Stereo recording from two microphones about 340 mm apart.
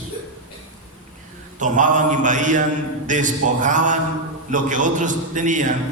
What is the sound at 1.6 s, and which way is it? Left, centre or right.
A man's voice, right.